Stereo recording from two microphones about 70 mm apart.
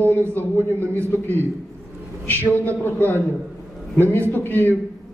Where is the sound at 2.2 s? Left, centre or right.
Left.